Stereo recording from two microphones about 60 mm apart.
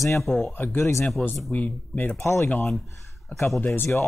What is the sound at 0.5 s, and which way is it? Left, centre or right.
Speech, left.